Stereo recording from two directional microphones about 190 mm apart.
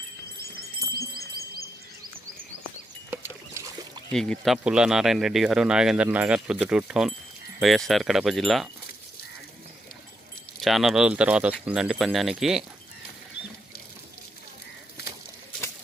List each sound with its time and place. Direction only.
0.9 s music: 55° right (ahead or behind)
3.1 s rowboat: 15° right (ahead or behind)
4.1 s speech: centre (ahead or behind)
10.6 s speech: centre (ahead or behind)